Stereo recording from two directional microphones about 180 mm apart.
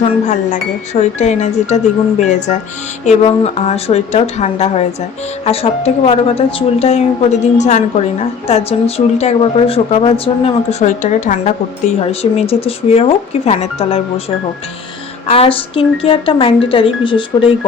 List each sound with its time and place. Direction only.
0.0 s speech: 40° left (ahead or behind)
9.1 s speech: 35° left (ahead or behind)
11.9 s speech: 35° left (ahead or behind)
15.3 s speech: 30° left (ahead or behind)